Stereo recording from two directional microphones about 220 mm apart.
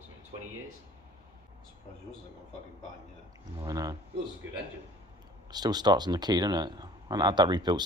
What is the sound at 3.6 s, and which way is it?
Speech, 15° right (ahead or behind).